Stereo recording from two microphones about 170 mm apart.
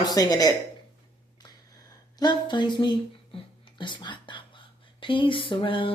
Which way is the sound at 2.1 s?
25° left (ahead or behind).